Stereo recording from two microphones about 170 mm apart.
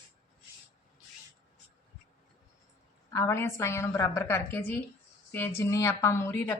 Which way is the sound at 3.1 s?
15° left (ahead or behind).